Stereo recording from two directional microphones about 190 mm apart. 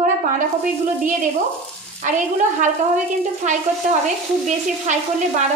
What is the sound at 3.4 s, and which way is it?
A woman's voice, 40° right (ahead or behind).